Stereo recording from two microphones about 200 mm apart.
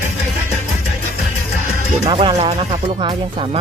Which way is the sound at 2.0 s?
30° right (ahead or behind).